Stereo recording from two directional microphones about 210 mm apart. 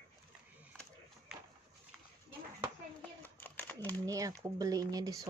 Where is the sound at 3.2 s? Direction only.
10° left (ahead or behind).